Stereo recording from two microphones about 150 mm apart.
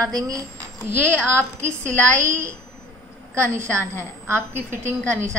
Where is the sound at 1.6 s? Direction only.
15° right (ahead or behind).